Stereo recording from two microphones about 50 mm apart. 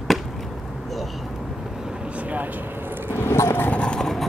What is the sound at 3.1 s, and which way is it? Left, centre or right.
Vehicle, left.